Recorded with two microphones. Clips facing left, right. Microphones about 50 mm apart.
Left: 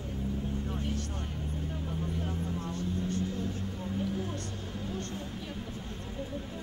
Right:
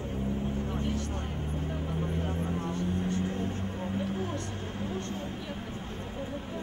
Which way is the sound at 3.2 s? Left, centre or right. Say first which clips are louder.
Right 2 dB; right.